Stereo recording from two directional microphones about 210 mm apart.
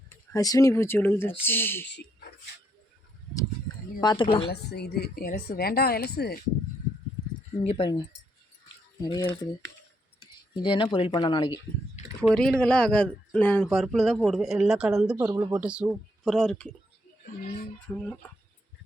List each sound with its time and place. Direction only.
0.3 s speech: 15° left (ahead or behind)
4.0 s speech: 20° left (ahead or behind)
4.7 s speech: 50° left (ahead or behind)
7.6 s speech: 25° left (ahead or behind)
10.5 s speech: 20° left (ahead or behind)
12.3 s speech: 5° left (ahead or behind)
17.9 s speech: 10° left (ahead or behind)